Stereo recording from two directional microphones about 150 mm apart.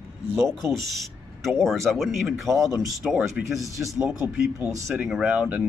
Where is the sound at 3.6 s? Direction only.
20° right (ahead or behind).